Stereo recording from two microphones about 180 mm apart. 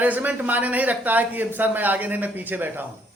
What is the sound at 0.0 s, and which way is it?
A man's voice, 10° right (ahead or behind).